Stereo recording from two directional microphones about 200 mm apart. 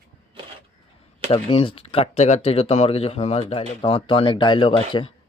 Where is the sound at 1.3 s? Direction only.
25° left (ahead or behind).